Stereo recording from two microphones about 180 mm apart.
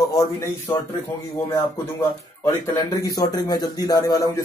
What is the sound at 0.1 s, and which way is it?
Speech, 20° left (ahead or behind).